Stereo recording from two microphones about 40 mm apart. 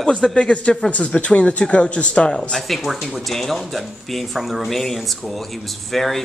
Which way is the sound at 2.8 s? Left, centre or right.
Centre.